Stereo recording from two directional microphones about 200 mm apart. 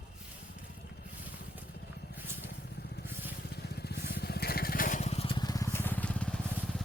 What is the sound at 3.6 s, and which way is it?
Crushing, 55° left (ahead or behind).